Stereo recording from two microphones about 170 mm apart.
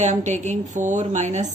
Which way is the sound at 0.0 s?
45° right (ahead or behind).